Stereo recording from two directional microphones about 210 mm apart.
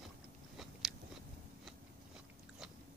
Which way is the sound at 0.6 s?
Centre (ahead or behind).